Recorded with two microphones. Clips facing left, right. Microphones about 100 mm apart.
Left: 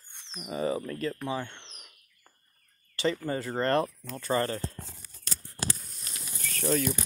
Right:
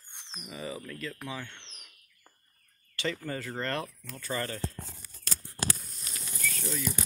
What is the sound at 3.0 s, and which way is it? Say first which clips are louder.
Speech: left 5 dB; 30° left (ahead or behind).